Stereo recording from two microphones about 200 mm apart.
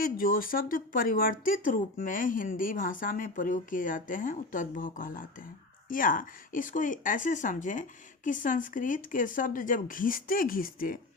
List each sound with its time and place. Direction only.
0.0 s speech: 45° left (ahead or behind)